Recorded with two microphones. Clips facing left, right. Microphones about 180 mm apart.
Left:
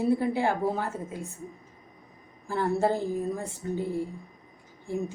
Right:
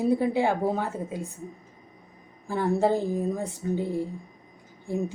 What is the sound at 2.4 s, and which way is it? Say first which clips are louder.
A woman's voice: right 2 dB; 15° right (ahead or behind).